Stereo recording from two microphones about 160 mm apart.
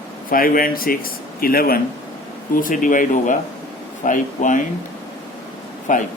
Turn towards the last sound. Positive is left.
turn(degrees=55)  # may be behind; listen again after turning